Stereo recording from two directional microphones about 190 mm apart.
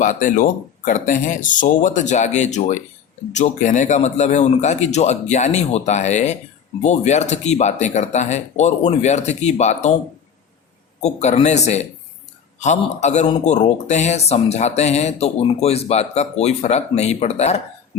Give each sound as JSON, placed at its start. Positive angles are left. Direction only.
{"t": 0.0, "sound": "a man's voice", "side_deg": 45}
{"t": 11.0, "sound": "a man's voice", "side_deg": 35}